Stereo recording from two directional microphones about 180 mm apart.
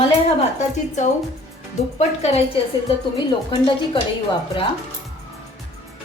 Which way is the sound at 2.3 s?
30° left (ahead or behind).